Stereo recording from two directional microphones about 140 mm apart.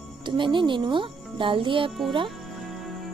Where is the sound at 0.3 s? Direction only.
35° right (ahead or behind).